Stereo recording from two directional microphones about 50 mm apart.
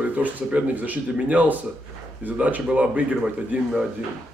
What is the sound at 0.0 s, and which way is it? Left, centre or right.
Speech, right.